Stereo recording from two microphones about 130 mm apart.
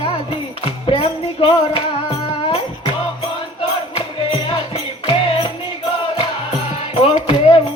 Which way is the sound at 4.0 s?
50° left (ahead or behind).